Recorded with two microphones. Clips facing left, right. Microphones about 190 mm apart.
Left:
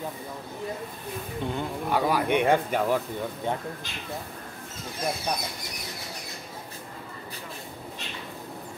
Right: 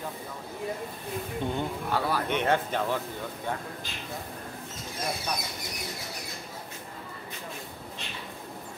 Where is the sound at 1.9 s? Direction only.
15° left (ahead or behind).